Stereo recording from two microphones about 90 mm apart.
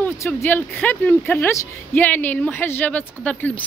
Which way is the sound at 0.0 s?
25° left (ahead or behind).